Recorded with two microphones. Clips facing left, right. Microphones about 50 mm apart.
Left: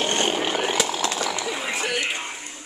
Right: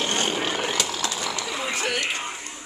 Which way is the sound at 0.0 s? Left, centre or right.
Left.